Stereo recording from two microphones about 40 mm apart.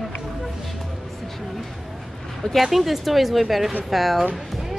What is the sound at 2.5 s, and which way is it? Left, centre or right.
Speech, centre.